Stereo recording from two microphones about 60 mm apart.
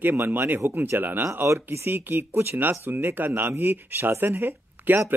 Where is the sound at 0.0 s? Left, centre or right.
Right.